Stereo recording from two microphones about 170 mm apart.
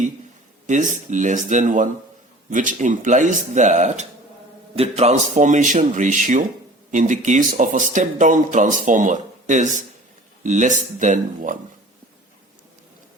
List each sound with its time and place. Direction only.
0.7 s speech: 45° right (ahead or behind)